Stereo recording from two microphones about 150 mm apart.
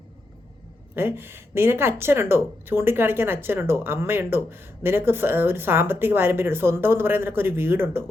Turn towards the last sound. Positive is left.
turn(degrees=-15)  # may be behind; listen again after turning